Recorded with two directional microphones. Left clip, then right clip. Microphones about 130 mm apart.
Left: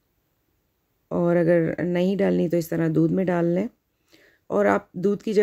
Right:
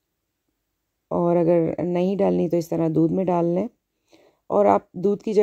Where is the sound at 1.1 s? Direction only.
25° right (ahead or behind).